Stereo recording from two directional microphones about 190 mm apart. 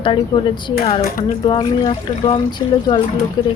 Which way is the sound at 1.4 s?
30° left (ahead or behind).